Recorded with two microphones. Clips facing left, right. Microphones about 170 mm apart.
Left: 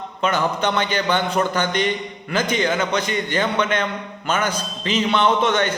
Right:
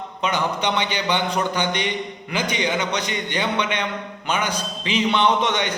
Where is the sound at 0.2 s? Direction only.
15° right (ahead or behind).